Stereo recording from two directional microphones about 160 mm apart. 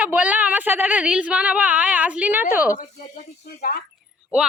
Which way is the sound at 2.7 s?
55° left (ahead or behind).